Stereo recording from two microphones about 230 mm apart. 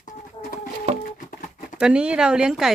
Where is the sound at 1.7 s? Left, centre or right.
Centre.